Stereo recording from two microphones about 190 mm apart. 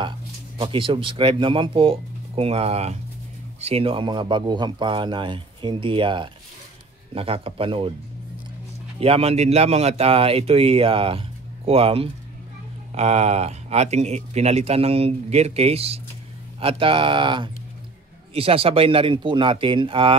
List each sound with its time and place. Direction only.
0.6 s speech: 30° right (ahead or behind)
9.0 s speech: 30° right (ahead or behind)